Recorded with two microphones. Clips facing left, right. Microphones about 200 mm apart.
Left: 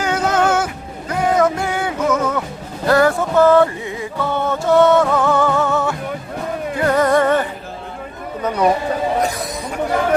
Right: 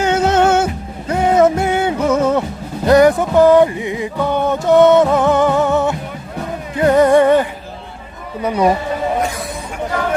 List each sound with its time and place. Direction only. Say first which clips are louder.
0.0 s music: right 4 dB; 25° right (ahead or behind); by 8.7 s 10° right (ahead or behind)